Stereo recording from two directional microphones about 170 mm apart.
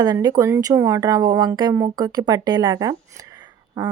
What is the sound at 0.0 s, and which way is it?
Speech, 25° right (ahead or behind).